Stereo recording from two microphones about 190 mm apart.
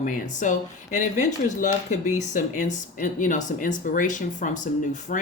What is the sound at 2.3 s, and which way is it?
Speech, 45° left (ahead or behind).